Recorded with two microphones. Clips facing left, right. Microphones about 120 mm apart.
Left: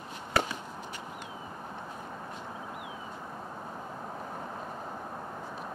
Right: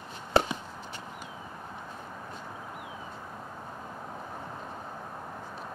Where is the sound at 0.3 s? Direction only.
25° right (ahead or behind).